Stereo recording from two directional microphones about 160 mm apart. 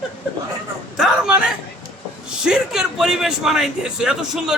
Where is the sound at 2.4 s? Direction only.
5° right (ahead or behind).